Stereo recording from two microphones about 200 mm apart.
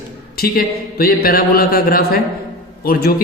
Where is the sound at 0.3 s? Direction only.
50° left (ahead or behind).